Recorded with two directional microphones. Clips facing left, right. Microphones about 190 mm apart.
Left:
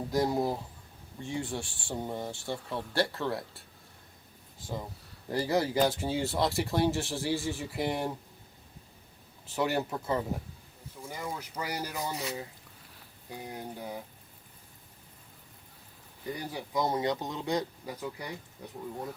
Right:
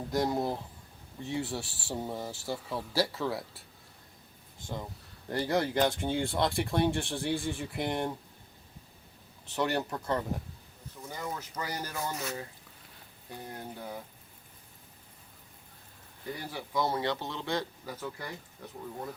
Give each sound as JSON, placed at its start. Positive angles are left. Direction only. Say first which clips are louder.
{"t": 0.1, "sound": "speech", "louder": "left 1 dB", "side_deg": 0}
{"t": 4.6, "sound": "speech", "louder": "left 1 dB", "side_deg": 5}
{"t": 9.6, "sound": "speech", "louder": "left 1 dB", "side_deg": 5}
{"t": 16.3, "sound": "speech", "louder": "left 1 dB", "side_deg": 15}